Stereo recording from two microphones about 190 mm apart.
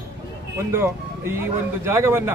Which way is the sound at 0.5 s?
15° right (ahead or behind).